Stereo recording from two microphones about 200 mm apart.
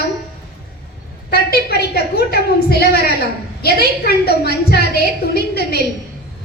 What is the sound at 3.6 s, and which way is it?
A woman's voice, 50° left (ahead or behind).